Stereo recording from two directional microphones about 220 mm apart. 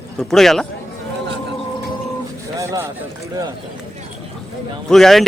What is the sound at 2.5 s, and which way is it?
Speech, 15° right (ahead or behind).